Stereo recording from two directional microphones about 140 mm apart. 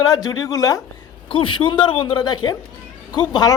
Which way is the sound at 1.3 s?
40° left (ahead or behind).